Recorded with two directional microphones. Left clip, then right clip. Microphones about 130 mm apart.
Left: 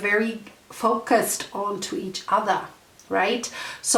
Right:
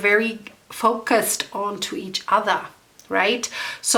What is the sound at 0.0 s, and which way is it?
A woman's voice, 25° right (ahead or behind).